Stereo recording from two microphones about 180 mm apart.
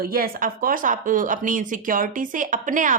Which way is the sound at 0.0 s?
55° right (ahead or behind).